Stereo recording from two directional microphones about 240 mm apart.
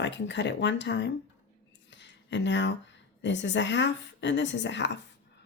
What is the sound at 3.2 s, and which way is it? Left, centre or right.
Speech, left.